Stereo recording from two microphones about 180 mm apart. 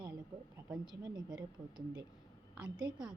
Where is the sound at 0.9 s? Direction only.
25° right (ahead or behind).